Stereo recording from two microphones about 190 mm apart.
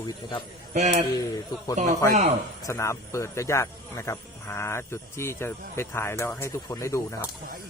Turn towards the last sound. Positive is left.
turn(degrees=15)  # may be behind; listen again after turning